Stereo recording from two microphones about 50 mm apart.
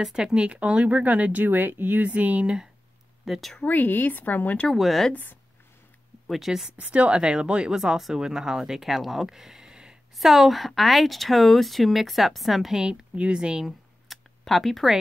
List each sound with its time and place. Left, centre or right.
0.0 s speech: centre; by 2.0 s right
2.0 s speech: right
3.3 s speech: centre
3.6 s speech: left
4.6 s speech: centre
5.1 s speech: left
6.2 s speech: centre
6.8 s speech: right
10.1 s speech: centre
13.1 s speech: right
14.0 s a sound: centre